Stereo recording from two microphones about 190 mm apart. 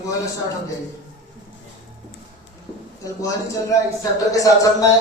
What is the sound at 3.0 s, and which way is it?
A man's voice, 15° left (ahead or behind).